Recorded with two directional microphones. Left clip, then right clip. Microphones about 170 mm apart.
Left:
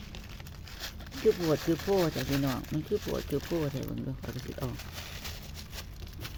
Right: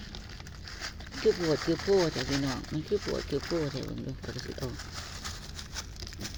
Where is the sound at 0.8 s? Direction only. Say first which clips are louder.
Even; 35° left (ahead or behind).